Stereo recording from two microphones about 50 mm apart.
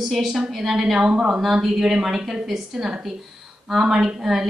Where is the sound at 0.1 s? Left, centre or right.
Centre.